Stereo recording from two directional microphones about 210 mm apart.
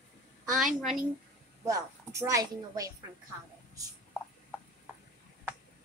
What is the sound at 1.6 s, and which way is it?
A child's voice, 15° right (ahead or behind).